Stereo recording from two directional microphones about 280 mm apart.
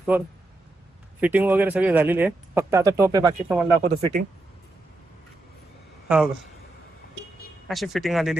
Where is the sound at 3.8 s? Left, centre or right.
Right.